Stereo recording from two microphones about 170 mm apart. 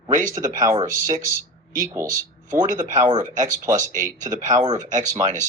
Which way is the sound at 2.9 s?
25° right (ahead or behind).